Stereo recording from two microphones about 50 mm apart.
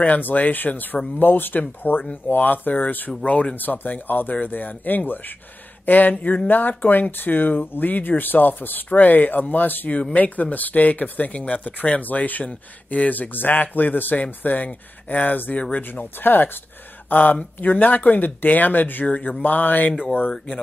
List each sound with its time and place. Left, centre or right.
0.0 s speech: left